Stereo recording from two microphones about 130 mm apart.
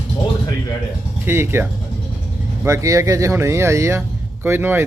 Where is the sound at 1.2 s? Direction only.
20° right (ahead or behind).